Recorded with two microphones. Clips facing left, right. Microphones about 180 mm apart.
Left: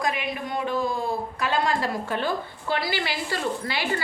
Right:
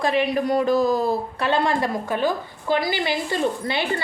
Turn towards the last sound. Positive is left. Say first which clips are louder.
# right 5 dB
turn(degrees=-25)  # may be behind; listen again after turning